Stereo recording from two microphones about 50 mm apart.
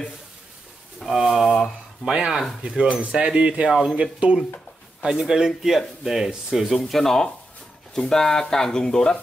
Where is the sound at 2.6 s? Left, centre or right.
Right.